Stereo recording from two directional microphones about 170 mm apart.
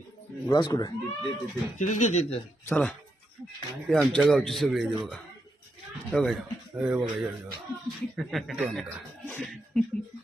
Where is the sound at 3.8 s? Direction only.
5° left (ahead or behind).